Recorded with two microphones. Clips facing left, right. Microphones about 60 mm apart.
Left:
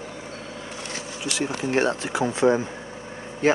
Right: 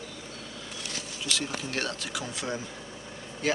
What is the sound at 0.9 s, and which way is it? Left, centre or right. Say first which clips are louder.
Speech: left 3 dB; left.